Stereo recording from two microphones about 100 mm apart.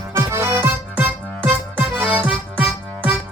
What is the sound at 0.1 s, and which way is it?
Music, 30° right (ahead or behind).